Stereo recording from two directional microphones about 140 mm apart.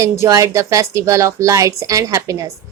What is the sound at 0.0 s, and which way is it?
A woman's voice, 20° right (ahead or behind).